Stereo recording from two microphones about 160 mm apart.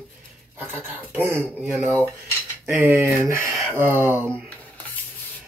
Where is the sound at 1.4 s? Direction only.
Centre (ahead or behind).